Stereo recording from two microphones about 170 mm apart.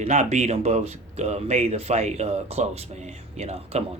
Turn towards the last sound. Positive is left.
turn(degrees=-35)  # may be behind; listen again after turning